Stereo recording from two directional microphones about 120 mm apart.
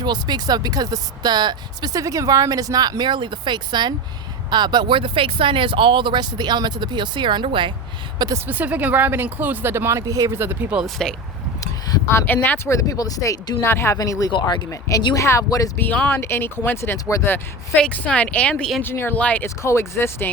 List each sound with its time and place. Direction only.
0.0 s speech: 35° right (ahead or behind)
8.4 s speech: 15° right (ahead or behind)
10.8 s speech: 5° left (ahead or behind)
11.6 s speech: 25° left (ahead or behind)
12.7 s speech: 30° left (ahead or behind)
15.8 s speech: 15° left (ahead or behind)
17.3 s speech: 10° left (ahead or behind)
18.8 s speech: 20° left (ahead or behind)